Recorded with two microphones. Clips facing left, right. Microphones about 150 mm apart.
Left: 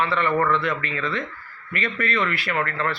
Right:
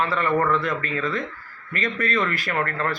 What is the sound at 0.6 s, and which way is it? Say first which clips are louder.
A man's voice: right 1 dB; 40° right (ahead or behind).